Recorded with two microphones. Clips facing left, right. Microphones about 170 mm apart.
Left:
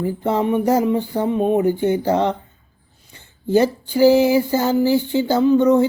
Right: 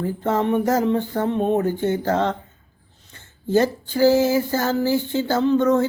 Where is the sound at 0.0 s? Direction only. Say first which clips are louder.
Left 2 dB; 15° left (ahead or behind).